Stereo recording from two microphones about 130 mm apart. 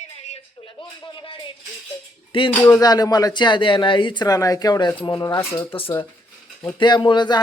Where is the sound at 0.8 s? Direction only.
40° left (ahead or behind).